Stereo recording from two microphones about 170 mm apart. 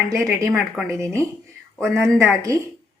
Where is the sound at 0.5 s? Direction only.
Centre (ahead or behind).